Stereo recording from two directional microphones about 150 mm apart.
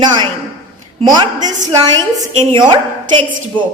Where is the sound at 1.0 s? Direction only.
25° right (ahead or behind).